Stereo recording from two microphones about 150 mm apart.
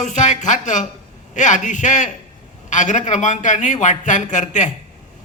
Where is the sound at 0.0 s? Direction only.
55° left (ahead or behind).